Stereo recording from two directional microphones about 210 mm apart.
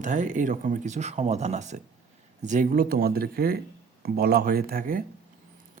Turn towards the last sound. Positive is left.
turn(degrees=-40)  # may be behind; listen again after turning